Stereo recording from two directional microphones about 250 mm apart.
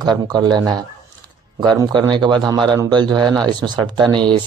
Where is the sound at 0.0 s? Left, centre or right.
Centre.